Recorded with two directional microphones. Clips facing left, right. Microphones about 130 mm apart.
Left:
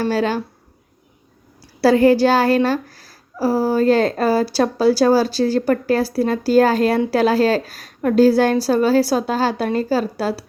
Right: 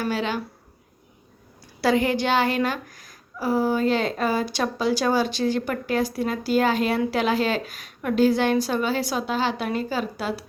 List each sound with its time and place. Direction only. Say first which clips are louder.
0.0 s speech: left 7 dB; 40° left (ahead or behind)
1.8 s speech: left 9 dB; 35° left (ahead or behind)